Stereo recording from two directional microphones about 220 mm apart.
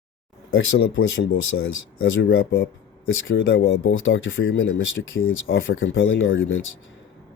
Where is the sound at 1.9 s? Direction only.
60° left (ahead or behind).